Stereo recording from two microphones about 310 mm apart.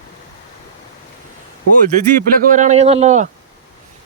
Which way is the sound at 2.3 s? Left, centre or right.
Right.